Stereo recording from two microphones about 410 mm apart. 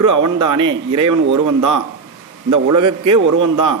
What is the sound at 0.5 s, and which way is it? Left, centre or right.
Speech, centre.